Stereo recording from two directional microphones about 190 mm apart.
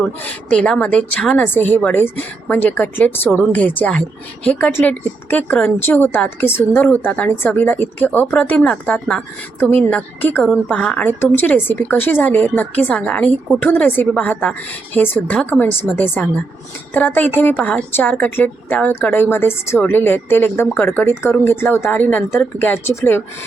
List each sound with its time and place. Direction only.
0.3 s a woman's voice: 5° left (ahead or behind)